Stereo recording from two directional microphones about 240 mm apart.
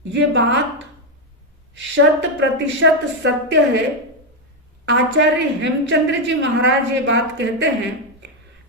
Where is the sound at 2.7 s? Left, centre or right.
Right.